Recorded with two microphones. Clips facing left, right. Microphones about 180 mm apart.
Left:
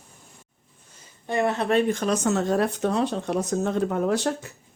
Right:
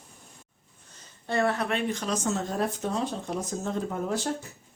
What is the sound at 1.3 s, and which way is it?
Speech, 20° left (ahead or behind).